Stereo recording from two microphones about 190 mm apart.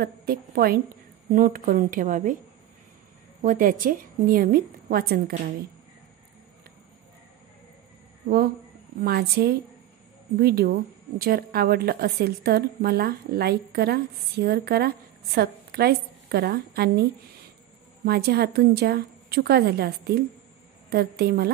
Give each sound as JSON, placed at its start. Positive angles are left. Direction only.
{"t": 0.0, "sound": "a woman's voice", "side_deg": -55}
{"t": 3.4, "sound": "a woman's voice", "side_deg": -45}
{"t": 9.0, "sound": "speech", "side_deg": -55}
{"t": 18.0, "sound": "a woman's voice", "side_deg": -55}